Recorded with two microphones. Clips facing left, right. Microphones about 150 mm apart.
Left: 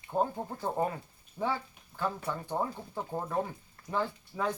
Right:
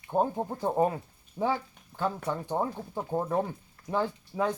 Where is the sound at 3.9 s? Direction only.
20° right (ahead or behind).